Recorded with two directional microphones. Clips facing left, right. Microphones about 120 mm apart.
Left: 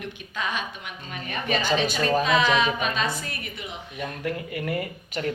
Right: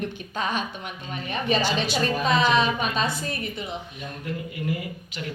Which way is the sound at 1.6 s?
50° left (ahead or behind).